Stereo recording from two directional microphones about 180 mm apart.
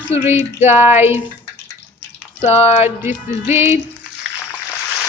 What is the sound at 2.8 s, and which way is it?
Music, 10° right (ahead or behind).